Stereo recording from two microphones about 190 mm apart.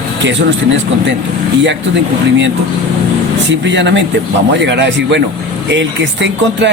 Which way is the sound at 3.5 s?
70° right (ahead or behind).